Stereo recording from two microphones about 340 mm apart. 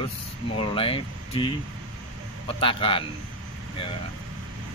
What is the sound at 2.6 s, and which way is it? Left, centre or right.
Speech, centre.